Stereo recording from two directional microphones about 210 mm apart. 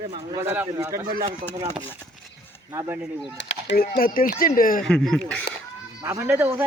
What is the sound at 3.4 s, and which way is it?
Speech, 60° left (ahead or behind).